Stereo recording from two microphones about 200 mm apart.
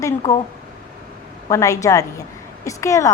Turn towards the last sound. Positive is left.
turn(degrees=15)  # may be behind; listen again after turning